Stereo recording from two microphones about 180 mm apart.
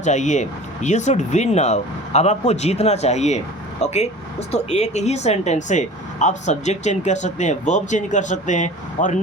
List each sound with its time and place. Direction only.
0.0 s speech: 40° left (ahead or behind)